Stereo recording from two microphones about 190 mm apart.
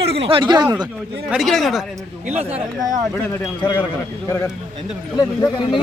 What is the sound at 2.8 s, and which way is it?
Speech, 20° right (ahead or behind).